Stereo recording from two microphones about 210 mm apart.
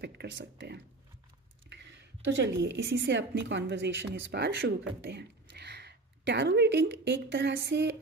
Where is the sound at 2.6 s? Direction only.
55° right (ahead or behind).